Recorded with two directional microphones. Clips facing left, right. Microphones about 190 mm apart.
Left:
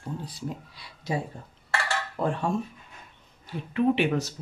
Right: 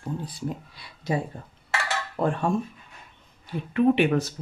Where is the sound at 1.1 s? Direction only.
55° right (ahead or behind).